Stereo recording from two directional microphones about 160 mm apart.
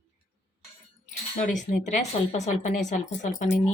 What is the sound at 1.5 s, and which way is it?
A woman's voice, 45° left (ahead or behind).